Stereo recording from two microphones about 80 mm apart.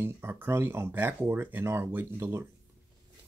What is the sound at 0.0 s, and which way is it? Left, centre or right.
Speech, right.